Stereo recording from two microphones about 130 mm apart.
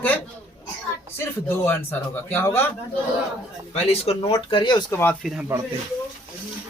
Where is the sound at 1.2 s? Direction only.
20° left (ahead or behind).